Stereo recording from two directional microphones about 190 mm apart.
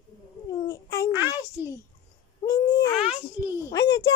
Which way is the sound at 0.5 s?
20° left (ahead or behind).